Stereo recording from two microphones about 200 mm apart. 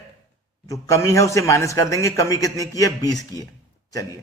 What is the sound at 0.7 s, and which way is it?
A man's voice, 15° left (ahead or behind).